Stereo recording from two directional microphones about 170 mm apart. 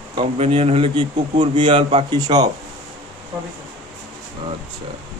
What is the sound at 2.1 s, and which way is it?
Speech, 25° right (ahead or behind).